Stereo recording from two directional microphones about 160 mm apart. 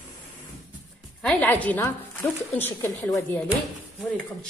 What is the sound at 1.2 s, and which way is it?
A woman's voice, 5° left (ahead or behind).